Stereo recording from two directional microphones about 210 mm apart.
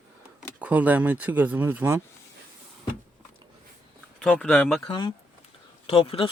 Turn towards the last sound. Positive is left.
turn(degrees=25)  # may be behind; listen again after turning